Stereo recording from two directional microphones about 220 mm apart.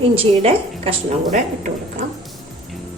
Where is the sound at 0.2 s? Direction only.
25° right (ahead or behind).